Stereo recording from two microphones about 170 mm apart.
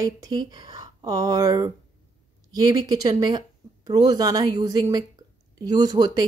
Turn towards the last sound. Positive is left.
turn(degrees=-25)  # may be behind; listen again after turning